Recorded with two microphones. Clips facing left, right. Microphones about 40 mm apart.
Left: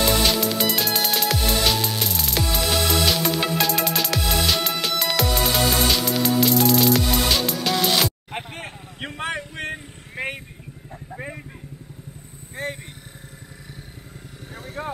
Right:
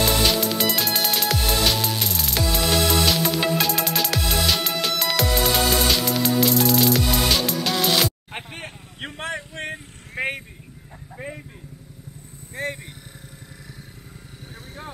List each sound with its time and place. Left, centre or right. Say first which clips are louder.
0.2 s music: even; centre
9.1 s a sound: left 2 dB; left
12.6 s vehicle: right 1 dB; centre
14.8 s vehicle: left 8 dB; left